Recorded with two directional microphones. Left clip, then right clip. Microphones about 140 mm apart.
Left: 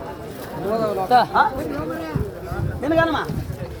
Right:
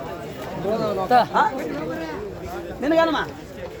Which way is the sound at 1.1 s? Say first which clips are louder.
Left 1 dB; 25° right (ahead or behind).